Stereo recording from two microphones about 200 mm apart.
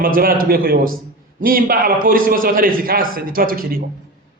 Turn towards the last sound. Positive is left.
turn(degrees=-45)  # may be behind; listen again after turning